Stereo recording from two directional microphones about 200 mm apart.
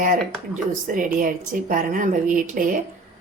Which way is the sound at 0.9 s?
40° right (ahead or behind).